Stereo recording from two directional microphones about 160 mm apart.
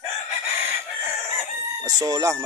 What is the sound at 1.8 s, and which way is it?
Speech, 25° right (ahead or behind).